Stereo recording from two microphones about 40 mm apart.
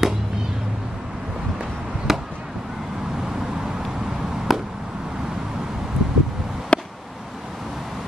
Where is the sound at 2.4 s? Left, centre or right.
Centre.